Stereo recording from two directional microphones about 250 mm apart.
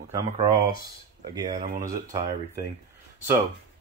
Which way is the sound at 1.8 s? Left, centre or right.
Centre.